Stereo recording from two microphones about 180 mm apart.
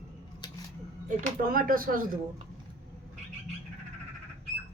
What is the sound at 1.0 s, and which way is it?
Speech, 50° right (ahead or behind).